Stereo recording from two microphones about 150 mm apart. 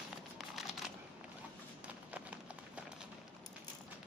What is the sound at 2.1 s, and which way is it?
Clip-clop, 10° right (ahead or behind).